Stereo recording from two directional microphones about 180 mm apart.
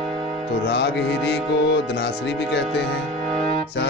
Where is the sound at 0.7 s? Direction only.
70° left (ahead or behind).